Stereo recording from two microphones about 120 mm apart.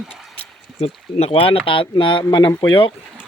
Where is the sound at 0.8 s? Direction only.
60° left (ahead or behind); by 2.9 s 45° left (ahead or behind).